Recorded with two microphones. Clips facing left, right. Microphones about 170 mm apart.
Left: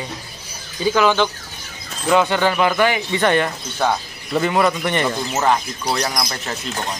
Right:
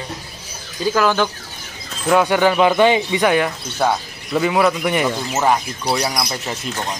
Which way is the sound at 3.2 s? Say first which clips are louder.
Right 1 dB; 5° right (ahead or behind).